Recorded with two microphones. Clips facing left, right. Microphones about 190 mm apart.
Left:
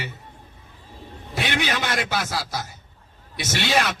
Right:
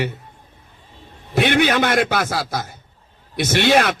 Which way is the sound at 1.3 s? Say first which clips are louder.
Right 9 dB; 60° right (ahead or behind).